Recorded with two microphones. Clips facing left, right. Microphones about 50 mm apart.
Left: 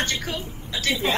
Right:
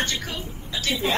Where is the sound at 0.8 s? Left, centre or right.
Left.